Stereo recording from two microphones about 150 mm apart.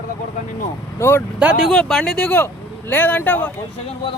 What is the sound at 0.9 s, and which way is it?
Speech, 15° left (ahead or behind).